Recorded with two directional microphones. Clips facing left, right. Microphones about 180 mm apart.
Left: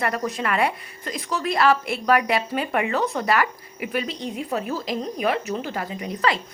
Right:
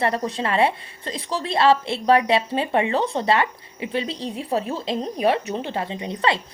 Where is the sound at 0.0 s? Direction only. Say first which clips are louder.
Right 2 dB; 30° right (ahead or behind).